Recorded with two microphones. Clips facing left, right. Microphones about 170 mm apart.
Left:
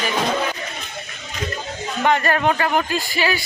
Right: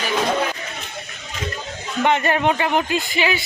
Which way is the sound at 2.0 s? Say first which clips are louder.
Even; 20° right (ahead or behind).